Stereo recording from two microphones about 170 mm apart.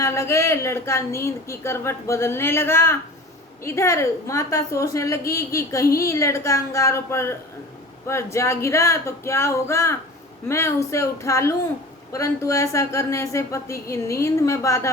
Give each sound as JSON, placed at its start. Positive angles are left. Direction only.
{"t": 0.0, "sound": "speech", "side_deg": 15}